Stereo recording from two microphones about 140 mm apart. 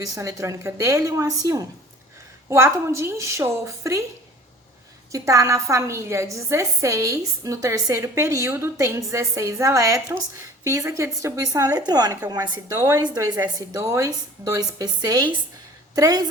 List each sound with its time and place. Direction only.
0.0 s a woman's voice: 25° right (ahead or behind)
5.1 s a woman's voice: 20° right (ahead or behind)